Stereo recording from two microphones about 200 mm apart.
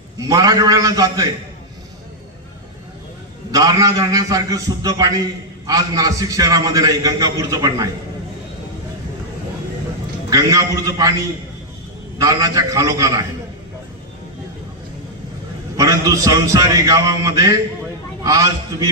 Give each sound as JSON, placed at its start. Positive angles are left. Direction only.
{"t": 0.2, "sound": "a man's voice", "side_deg": -15}
{"t": 3.5, "sound": "a man's voice", "side_deg": -15}
{"t": 10.2, "sound": "a man's voice", "side_deg": -20}
{"t": 12.2, "sound": "a man's voice", "side_deg": -15}
{"t": 15.8, "sound": "a man's voice", "side_deg": -15}